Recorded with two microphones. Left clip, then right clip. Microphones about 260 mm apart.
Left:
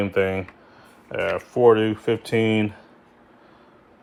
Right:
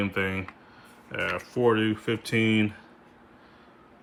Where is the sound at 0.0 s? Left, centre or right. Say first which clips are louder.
Left 7 dB; centre.